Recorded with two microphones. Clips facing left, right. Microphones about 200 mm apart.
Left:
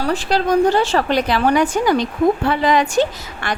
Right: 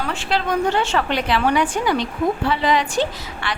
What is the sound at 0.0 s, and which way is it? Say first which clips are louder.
A woman's voice: left 5 dB; 40° left (ahead or behind).